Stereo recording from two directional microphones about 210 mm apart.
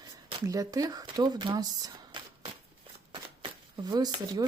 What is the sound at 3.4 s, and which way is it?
Speech, 20° right (ahead or behind).